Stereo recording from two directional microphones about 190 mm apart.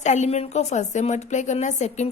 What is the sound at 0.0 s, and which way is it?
A woman's voice, 40° left (ahead or behind).